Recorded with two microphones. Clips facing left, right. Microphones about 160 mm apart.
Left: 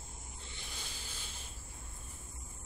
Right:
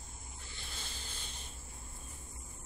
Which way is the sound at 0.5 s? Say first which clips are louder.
Right 1 dB; 15° left (ahead or behind).